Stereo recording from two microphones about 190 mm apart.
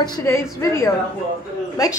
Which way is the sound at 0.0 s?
15° left (ahead or behind).